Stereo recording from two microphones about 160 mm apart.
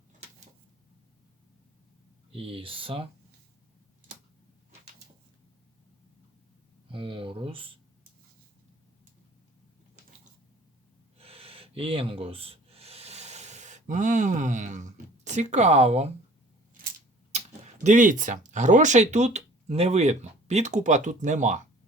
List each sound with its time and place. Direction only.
2.3 s speech: 35° right (ahead or behind)
6.9 s speech: 35° right (ahead or behind)
11.2 s rub: 35° right (ahead or behind)
17.8 s speech: 50° right (ahead or behind)